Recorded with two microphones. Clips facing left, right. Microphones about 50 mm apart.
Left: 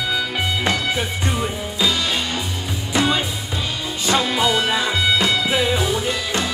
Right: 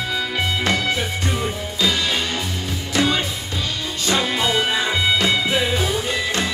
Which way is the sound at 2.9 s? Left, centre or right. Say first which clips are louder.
Left 1 dB; centre.